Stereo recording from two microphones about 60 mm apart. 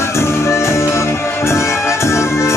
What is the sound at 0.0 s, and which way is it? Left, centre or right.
Music, left.